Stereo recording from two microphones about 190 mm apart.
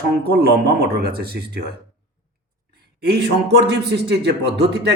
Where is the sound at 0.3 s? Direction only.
55° right (ahead or behind).